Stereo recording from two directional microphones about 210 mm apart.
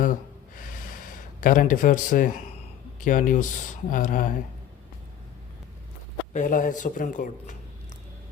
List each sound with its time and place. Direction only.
0.0 s a sound: 40° left (ahead or behind)
3.0 s speech: 40° left (ahead or behind)
6.3 s speech: 40° left (ahead or behind)